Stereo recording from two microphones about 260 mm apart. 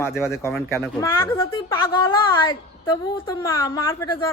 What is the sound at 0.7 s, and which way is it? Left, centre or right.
A woman's voice, centre.